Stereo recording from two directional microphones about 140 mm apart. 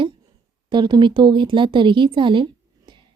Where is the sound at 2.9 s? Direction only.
35° right (ahead or behind).